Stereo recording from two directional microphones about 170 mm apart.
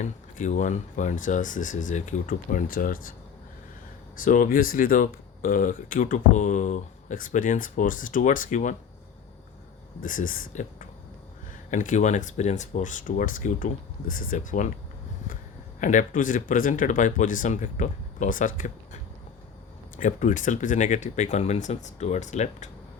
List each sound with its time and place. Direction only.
0.0 s speech: 45° left (ahead or behind)
4.2 s speech: 50° left (ahead or behind)
10.0 s speech: 50° left (ahead or behind)
15.8 s speech: 50° left (ahead or behind)
20.0 s speech: 50° left (ahead or behind)